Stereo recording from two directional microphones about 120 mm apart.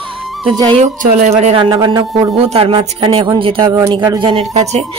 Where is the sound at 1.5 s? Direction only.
45° right (ahead or behind).